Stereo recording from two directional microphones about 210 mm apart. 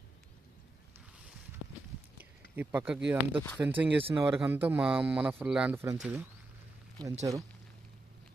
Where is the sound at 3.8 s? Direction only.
5° right (ahead or behind).